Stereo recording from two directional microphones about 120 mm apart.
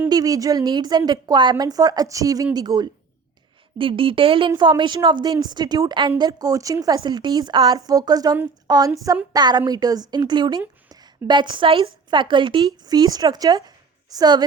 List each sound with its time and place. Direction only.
0.1 s a woman's voice: 30° right (ahead or behind)
3.8 s a woman's voice: 45° right (ahead or behind)